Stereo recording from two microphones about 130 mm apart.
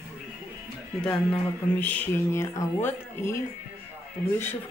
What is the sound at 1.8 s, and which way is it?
Speech, 15° left (ahead or behind).